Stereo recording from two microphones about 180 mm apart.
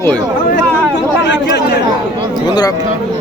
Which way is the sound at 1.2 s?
70° left (ahead or behind).